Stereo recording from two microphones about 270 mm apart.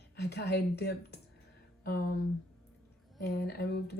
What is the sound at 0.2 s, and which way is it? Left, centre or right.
Speech, left.